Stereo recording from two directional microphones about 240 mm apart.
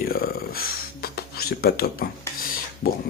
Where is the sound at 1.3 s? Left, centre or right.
Left.